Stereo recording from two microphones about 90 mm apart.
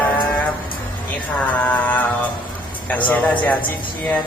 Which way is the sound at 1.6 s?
20° left (ahead or behind).